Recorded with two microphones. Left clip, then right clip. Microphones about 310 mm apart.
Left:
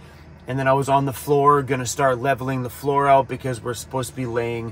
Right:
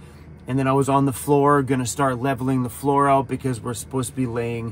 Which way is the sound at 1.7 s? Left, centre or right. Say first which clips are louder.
Left 2 dB; right.